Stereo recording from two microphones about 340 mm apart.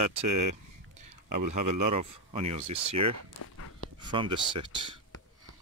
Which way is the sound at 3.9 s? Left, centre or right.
Centre.